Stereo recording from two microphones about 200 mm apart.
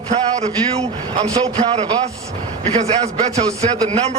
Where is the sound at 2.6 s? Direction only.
30° right (ahead or behind).